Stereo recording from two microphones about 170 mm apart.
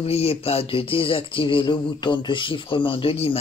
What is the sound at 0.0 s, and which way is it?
Speech, 35° left (ahead or behind).